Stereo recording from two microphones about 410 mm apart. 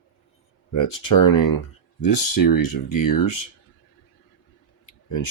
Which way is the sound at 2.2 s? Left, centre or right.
Left.